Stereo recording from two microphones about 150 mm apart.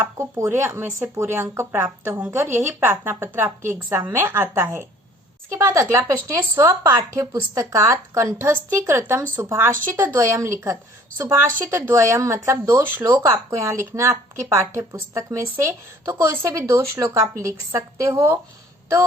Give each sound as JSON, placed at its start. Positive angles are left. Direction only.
{"t": 0.2, "sound": "speech", "side_deg": -20}
{"t": 13.1, "sound": "speech", "side_deg": -25}